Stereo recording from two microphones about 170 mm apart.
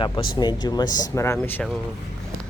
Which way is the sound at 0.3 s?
25° left (ahead or behind).